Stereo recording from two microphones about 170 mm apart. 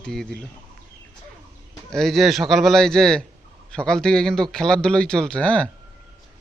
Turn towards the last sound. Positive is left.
turn(degrees=5)  # may be behind; listen again after turning